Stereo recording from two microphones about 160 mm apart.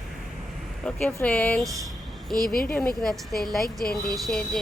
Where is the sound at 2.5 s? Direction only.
65° left (ahead or behind).